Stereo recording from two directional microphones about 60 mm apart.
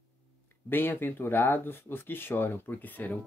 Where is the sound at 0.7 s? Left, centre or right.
Left.